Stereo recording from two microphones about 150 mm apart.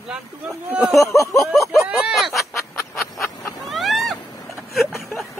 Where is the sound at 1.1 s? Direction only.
20° left (ahead or behind).